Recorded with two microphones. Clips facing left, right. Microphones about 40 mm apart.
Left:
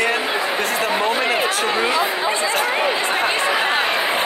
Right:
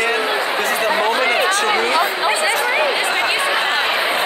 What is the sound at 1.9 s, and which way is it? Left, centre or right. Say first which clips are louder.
Speech: right 2 dB; right.